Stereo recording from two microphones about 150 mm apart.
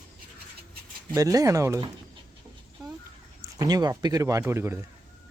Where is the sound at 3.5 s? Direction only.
25° right (ahead or behind).